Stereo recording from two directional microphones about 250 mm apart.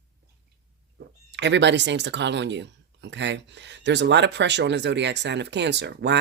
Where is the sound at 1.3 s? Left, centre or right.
Right.